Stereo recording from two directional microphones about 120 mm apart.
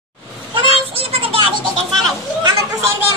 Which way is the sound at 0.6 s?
50° right (ahead or behind).